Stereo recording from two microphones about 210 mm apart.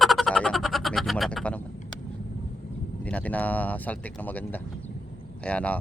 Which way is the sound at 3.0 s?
5° left (ahead or behind).